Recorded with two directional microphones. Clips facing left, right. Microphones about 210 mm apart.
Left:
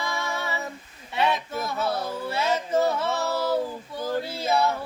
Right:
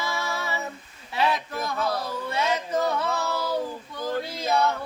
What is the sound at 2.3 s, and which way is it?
Music, 25° left (ahead or behind).